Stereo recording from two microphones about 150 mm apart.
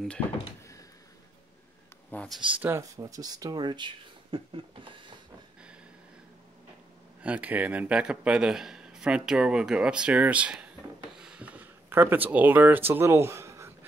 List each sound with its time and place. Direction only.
2.0 s speech: 5° left (ahead or behind)
2.6 s speech: 20° right (ahead or behind); by 4.9 s 35° right (ahead or behind)
7.2 s a man's voice: 10° right (ahead or behind)